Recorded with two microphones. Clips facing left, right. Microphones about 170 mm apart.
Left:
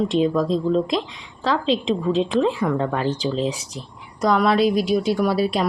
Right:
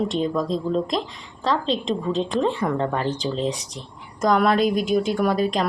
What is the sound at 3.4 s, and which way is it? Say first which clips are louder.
Speech: even; 35° right (ahead or behind).